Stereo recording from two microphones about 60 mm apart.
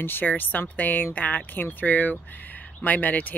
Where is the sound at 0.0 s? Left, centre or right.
Left.